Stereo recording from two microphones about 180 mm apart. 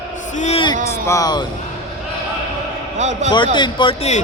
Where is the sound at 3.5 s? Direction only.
25° left (ahead or behind).